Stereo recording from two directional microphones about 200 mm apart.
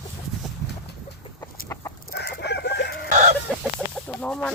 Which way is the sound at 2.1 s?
50° left (ahead or behind).